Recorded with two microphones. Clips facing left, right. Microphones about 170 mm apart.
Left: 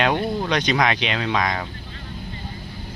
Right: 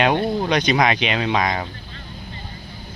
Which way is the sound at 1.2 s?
20° right (ahead or behind).